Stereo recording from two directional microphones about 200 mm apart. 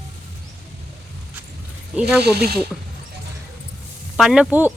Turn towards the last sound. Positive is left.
turn(degrees=-5)  # may be behind; listen again after turning